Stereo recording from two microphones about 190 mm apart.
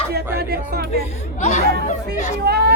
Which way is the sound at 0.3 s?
55° right (ahead or behind).